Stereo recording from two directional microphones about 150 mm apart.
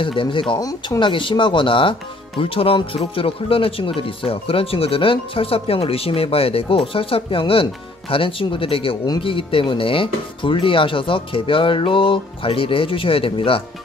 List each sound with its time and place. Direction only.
0.2 s speech: 35° left (ahead or behind)